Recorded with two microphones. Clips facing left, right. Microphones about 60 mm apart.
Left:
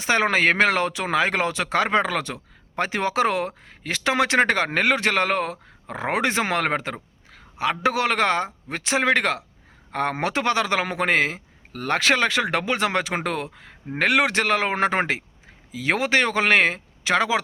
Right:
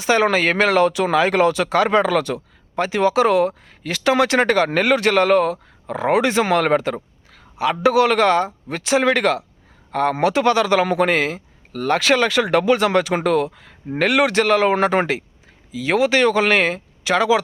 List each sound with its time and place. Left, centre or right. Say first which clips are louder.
0.0 s a man's voice: right 3 dB; left